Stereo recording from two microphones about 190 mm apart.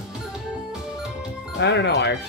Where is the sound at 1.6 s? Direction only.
65° left (ahead or behind).